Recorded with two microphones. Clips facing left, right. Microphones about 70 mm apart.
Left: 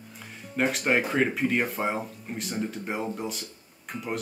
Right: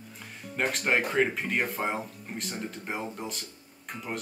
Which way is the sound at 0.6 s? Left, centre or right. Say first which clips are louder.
Left 2 dB; centre.